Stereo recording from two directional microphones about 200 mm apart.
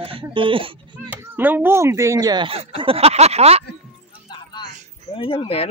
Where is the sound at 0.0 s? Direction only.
25° right (ahead or behind).